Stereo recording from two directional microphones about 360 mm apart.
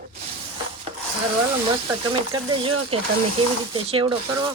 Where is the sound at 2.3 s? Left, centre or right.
Centre.